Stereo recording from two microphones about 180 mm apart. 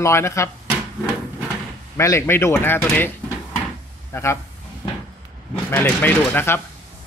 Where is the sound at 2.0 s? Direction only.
15° left (ahead or behind).